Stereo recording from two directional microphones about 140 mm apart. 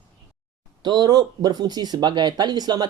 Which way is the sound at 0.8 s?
30° right (ahead or behind).